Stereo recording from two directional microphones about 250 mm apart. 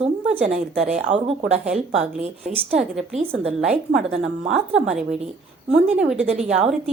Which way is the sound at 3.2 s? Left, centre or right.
Right.